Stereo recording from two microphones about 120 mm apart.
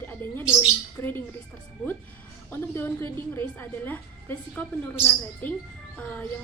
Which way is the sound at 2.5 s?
20° left (ahead or behind).